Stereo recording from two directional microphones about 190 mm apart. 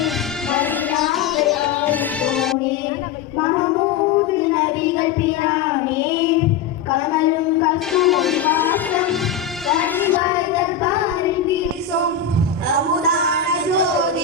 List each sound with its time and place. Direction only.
1.1 s music: centre (ahead or behind)
7.9 s music: centre (ahead or behind)
12.6 s a sound: 55° right (ahead or behind)